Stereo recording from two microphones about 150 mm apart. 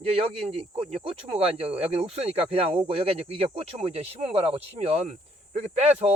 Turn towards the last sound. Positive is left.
turn(degrees=-45)  # may be behind; listen again after turning